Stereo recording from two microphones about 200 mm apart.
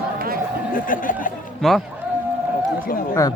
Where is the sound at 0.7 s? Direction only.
45° left (ahead or behind).